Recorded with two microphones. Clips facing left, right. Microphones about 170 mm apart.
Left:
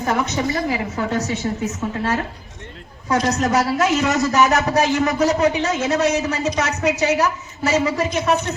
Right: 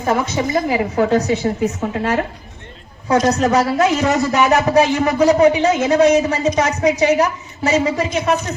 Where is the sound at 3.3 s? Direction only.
30° right (ahead or behind).